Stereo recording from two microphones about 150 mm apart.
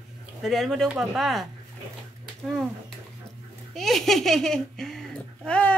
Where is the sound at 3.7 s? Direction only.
Centre (ahead or behind).